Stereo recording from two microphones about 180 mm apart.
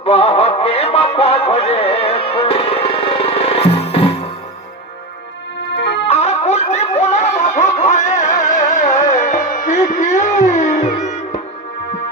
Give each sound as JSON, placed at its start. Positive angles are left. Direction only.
{"t": 0.0, "sound": "music", "side_deg": 35}
{"t": 5.7, "sound": "music", "side_deg": 70}
{"t": 6.1, "sound": "music", "side_deg": 35}